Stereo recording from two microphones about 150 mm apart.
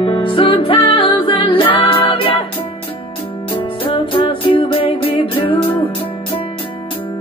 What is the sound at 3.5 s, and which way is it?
Music, 35° left (ahead or behind).